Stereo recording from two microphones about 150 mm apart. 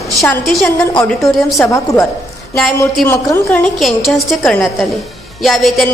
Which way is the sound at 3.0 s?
15° left (ahead or behind).